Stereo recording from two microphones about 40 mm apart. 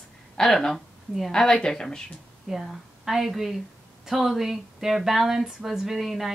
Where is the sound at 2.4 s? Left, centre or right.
Centre.